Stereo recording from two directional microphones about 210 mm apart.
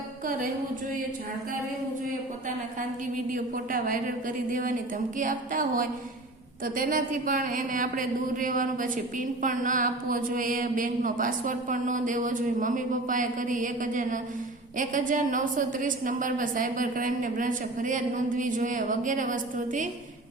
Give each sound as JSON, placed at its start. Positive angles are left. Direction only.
{"t": 3.3, "sound": "speech", "side_deg": -40}